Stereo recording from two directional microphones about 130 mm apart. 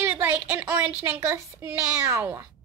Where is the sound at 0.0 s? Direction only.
15° right (ahead or behind).